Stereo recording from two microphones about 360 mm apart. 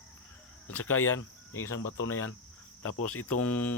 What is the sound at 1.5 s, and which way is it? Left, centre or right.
Speech, centre.